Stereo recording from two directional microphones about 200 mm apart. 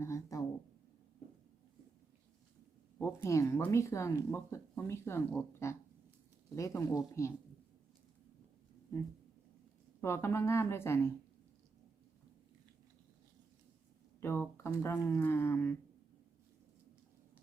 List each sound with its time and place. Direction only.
0.0 s speech: 15° left (ahead or behind)
3.0 s speech: 10° left (ahead or behind)
10.0 s speech: 10° left (ahead or behind)
14.2 s speech: 10° left (ahead or behind)